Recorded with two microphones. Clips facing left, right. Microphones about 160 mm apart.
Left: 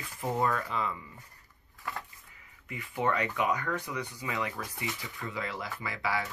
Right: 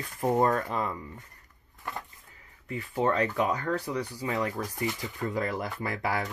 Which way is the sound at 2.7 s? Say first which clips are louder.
Right 3 dB; 35° right (ahead or behind).